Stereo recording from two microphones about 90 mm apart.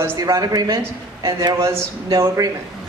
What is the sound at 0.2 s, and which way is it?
Speech, 40° right (ahead or behind).